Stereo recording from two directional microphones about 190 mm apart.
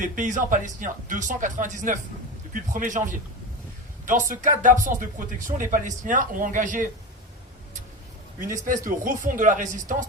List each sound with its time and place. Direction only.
0.0 s speech: 40° right (ahead or behind)
8.6 s speech: 45° right (ahead or behind)